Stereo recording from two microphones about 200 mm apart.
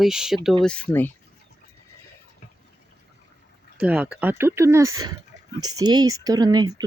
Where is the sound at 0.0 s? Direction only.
5° right (ahead or behind).